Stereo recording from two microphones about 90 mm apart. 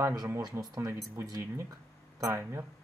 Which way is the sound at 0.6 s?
40° right (ahead or behind).